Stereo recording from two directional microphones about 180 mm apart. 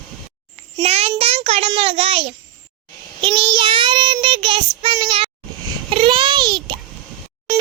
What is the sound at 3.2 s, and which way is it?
Child singing, 30° right (ahead or behind).